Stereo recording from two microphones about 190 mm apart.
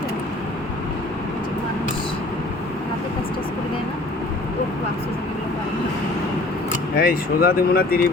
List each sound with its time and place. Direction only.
6.9 s speech: 50° left (ahead or behind)